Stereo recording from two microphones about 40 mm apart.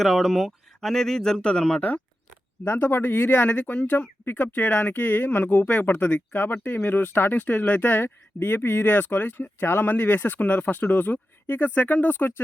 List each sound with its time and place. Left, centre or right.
0.0 s speech: centre
2.6 s speech: left
3.5 s speech: left
5.6 s speech: left
6.3 s speech: left